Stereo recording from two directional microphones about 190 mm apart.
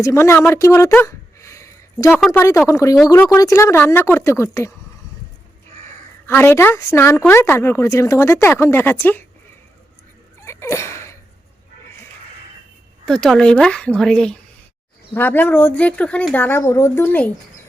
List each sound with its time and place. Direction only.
0.0 s a woman's voice: 15° left (ahead or behind)
0.3 s a sound: 10° left (ahead or behind)
2.2 s a woman's voice: 10° left (ahead or behind)
6.2 s a woman's voice: 10° left (ahead or behind)
10.4 s a sound: 15° left (ahead or behind)
13.1 s a woman's voice: 5° left (ahead or behind)